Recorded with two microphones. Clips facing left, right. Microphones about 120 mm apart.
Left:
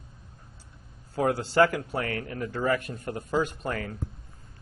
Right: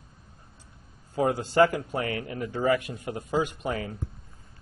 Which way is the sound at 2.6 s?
5° right (ahead or behind).